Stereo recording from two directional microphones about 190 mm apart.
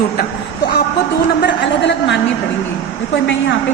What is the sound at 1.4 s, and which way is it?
Speech, 65° left (ahead or behind).